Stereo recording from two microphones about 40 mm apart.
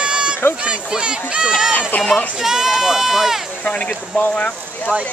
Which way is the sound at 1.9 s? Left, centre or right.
Left.